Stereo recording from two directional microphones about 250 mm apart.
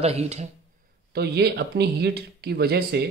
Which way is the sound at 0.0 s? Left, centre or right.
Right.